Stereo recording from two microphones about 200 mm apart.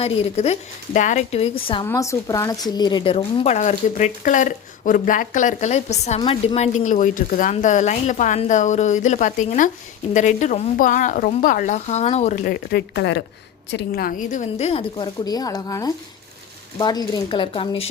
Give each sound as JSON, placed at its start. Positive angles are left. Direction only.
{"t": 0.0, "sound": "a woman's voice", "side_deg": 30}
{"t": 1.9, "sound": "a woman's voice", "side_deg": 15}
{"t": 12.7, "sound": "a woman's voice", "side_deg": 55}